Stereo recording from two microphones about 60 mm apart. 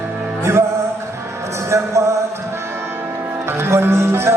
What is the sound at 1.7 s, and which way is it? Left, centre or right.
Speech, right.